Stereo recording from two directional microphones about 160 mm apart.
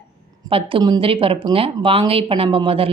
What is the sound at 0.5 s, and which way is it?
A woman's voice, 30° right (ahead or behind).